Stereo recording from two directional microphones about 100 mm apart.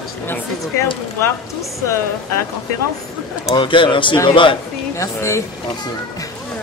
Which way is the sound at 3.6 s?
55° left (ahead or behind).